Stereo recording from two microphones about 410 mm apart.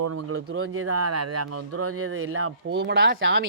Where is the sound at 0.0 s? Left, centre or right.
Right.